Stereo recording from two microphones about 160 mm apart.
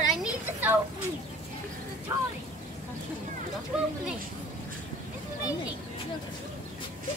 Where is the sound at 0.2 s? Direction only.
10° right (ahead or behind).